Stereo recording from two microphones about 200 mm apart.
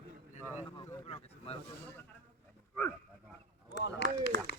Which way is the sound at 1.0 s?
30° left (ahead or behind).